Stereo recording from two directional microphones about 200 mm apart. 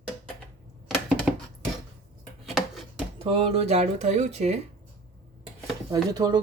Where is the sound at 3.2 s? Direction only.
30° right (ahead or behind).